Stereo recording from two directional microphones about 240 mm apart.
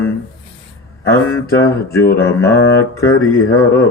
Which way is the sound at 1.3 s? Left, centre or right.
Centre.